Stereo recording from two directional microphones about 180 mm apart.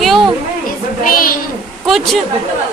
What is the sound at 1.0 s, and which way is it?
Speech, 50° left (ahead or behind).